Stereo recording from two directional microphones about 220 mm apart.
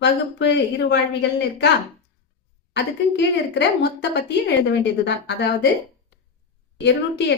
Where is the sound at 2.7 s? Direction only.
50° left (ahead or behind).